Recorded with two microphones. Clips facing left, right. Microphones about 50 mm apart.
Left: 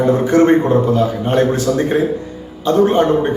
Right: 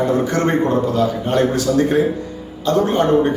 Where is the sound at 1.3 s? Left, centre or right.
Left.